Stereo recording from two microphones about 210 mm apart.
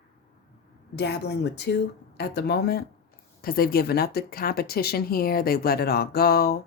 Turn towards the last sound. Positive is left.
turn(degrees=50)  # may be behind; listen again after turning